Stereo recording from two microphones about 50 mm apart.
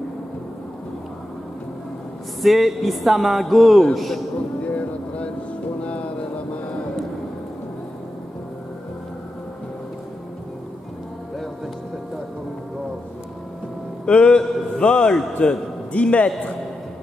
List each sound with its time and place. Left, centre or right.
2.4 s speech: centre
4.6 s vehicle: left
5.8 s a sound: left
14.0 s a man's voice: left